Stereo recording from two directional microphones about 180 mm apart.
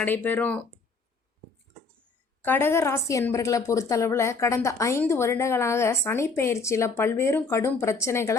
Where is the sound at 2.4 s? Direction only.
10° left (ahead or behind).